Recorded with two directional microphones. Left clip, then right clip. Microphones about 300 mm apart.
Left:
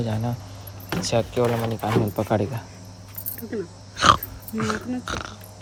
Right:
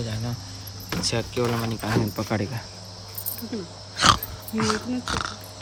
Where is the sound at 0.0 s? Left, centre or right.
Centre.